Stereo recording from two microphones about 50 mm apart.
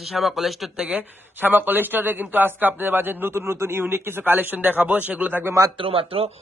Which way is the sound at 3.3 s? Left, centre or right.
Right.